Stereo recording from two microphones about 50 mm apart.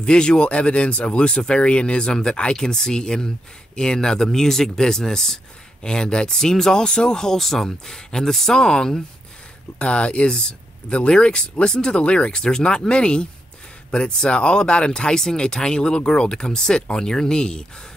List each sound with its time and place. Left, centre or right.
0.0 s speech: centre